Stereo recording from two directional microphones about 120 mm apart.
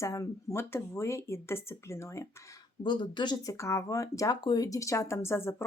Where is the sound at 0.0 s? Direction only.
25° left (ahead or behind).